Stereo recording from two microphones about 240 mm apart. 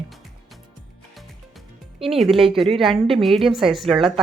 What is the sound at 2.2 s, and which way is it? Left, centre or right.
A woman's voice, centre.